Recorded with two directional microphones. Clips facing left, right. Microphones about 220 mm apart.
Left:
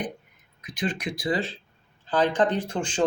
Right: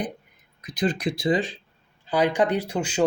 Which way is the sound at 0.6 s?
40° right (ahead or behind).